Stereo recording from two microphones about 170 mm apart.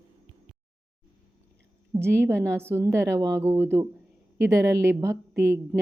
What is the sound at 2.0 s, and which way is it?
A woman's voice, 15° right (ahead or behind).